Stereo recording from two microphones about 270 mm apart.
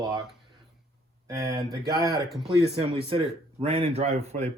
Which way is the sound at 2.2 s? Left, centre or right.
Centre.